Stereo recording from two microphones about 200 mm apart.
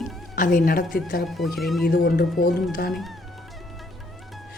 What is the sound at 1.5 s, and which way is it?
Speech, centre (ahead or behind).